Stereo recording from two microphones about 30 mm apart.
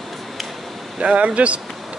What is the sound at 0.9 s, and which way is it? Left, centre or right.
Speech, right.